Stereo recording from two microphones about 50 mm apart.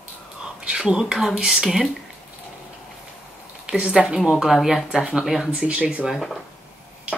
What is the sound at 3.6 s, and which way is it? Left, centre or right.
Speech, centre.